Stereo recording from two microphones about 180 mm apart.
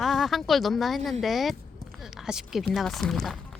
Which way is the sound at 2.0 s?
5° right (ahead or behind).